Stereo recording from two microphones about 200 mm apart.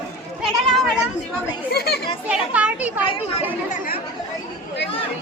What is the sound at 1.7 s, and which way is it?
Speech, 50° left (ahead or behind).